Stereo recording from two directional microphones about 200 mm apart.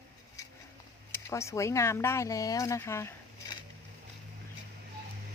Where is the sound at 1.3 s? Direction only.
15° left (ahead or behind).